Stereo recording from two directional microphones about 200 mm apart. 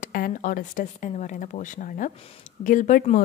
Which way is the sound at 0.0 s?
45° left (ahead or behind).